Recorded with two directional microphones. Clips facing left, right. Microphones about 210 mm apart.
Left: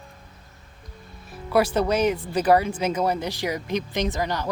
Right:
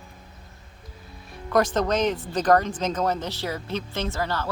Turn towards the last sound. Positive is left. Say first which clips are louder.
# left 2 dB
turn(degrees=15)  # may be behind; listen again after turning